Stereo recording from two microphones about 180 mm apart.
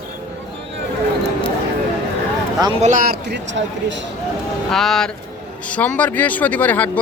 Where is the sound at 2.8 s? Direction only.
50° right (ahead or behind); by 4.0 s 90° right.